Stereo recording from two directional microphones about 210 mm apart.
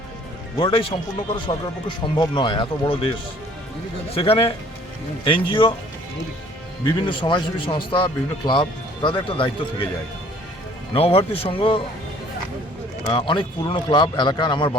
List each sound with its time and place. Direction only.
0.6 s speech: 25° left (ahead or behind)
4.1 s speech: 25° left (ahead or behind)
6.8 s speech: 25° left (ahead or behind)
10.9 s speech: 25° left (ahead or behind)
13.1 s speech: 20° left (ahead or behind)